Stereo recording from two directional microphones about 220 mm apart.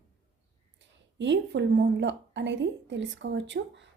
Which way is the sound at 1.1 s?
55° right (ahead or behind).